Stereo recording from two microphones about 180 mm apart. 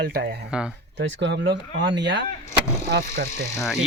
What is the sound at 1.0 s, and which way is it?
Speech, 75° right (ahead or behind).